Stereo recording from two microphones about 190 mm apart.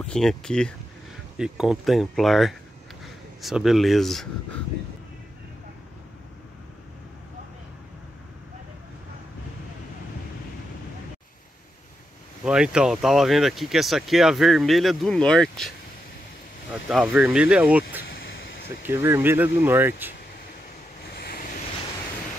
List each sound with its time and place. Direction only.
0.0 s speech: 5° left (ahead or behind)
12.4 s speech: 5° right (ahead or behind)
16.7 s speech: centre (ahead or behind)
18.1 s a sound: 65° left (ahead or behind)
18.9 s speech: 10° right (ahead or behind)
21.2 s vehicle: 50° left (ahead or behind)